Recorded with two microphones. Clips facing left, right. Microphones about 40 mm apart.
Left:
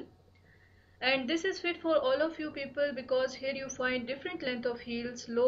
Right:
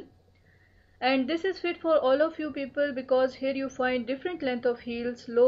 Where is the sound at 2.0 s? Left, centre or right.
Centre.